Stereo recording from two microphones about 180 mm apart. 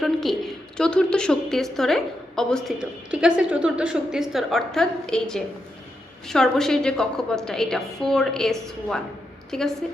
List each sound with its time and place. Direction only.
0.0 s a woman's voice: centre (ahead or behind)